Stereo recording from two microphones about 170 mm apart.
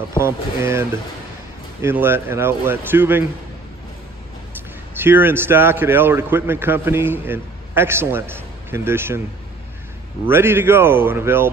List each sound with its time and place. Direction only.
0.2 s a man's voice: 15° right (ahead or behind)
4.9 s a man's voice: 10° right (ahead or behind)
10.2 s a man's voice: 15° right (ahead or behind)